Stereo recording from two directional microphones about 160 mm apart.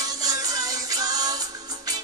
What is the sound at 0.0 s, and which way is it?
Music, 20° right (ahead or behind).